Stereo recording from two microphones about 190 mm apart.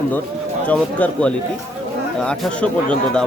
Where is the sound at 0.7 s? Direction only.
5° left (ahead or behind).